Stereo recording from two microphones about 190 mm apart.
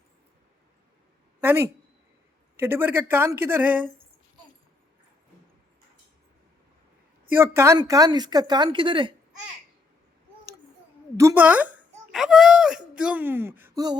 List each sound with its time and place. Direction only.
1.4 s a woman's voice: 15° right (ahead or behind)
7.3 s a woman's voice: 15° right (ahead or behind)
11.2 s speech: 10° right (ahead or behind)